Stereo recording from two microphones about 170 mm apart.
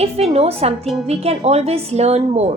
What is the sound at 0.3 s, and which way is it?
A woman's voice, 35° right (ahead or behind).